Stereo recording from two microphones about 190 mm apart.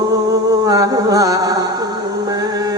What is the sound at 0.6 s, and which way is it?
Music, 20° right (ahead or behind).